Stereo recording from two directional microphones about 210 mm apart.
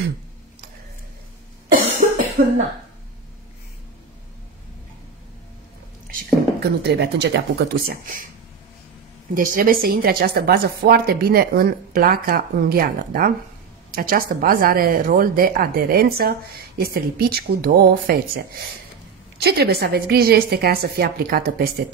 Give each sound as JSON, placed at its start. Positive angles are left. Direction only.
{"t": 2.4, "sound": "speech", "side_deg": -40}
{"t": 6.0, "sound": "speech", "side_deg": -45}
{"t": 9.3, "sound": "speech", "side_deg": -40}
{"t": 19.4, "sound": "speech", "side_deg": -50}